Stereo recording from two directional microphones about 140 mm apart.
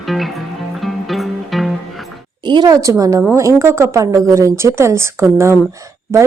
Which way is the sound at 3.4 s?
20° right (ahead or behind).